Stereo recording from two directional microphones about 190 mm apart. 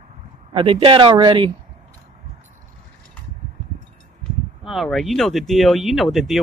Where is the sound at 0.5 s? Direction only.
30° right (ahead or behind).